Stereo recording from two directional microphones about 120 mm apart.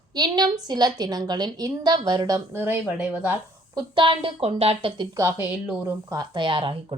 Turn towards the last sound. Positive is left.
turn(degrees=-45)  # may be behind; listen again after turning